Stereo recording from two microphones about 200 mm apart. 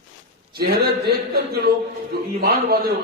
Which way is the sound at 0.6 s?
50° right (ahead or behind).